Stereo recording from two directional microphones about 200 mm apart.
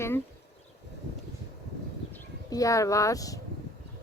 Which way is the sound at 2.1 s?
15° left (ahead or behind).